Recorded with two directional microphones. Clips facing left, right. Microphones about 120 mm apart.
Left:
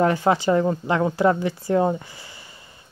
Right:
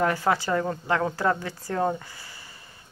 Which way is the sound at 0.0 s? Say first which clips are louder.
Left 5 dB; 20° left (ahead or behind).